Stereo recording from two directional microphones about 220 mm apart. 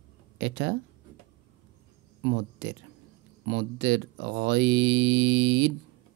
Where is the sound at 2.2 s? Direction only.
50° right (ahead or behind).